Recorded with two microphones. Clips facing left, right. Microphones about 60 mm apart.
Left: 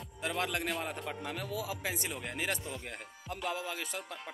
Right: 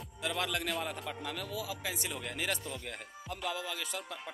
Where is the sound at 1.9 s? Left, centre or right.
Left.